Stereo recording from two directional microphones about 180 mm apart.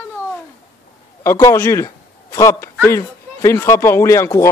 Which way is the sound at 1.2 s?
15° left (ahead or behind).